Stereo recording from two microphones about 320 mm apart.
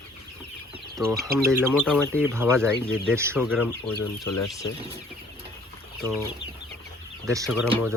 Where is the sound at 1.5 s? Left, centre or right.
Centre.